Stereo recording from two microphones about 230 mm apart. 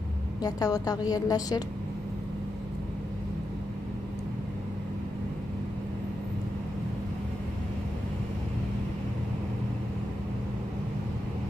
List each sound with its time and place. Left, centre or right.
0.4 s a woman's voice: centre